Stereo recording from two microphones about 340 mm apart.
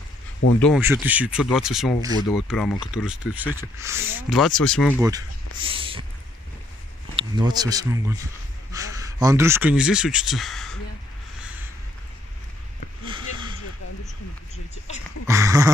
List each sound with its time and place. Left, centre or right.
0.6 s speech: centre
2.2 s speech: centre
5.0 s speech: centre
7.2 s speech: centre
15.2 s speech: centre